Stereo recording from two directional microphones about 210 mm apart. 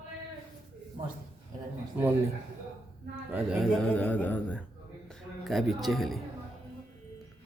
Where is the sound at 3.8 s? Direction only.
5° left (ahead or behind).